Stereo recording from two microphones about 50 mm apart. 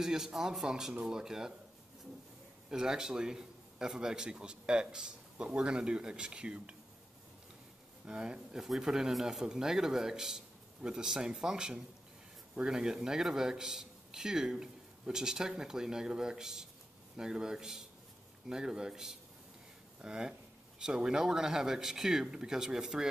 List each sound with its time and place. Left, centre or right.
0.0 s a man's voice: centre
2.7 s a man's voice: centre
8.1 s a man's voice: centre